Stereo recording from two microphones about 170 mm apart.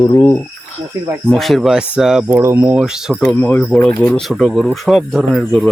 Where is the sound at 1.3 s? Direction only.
Centre (ahead or behind).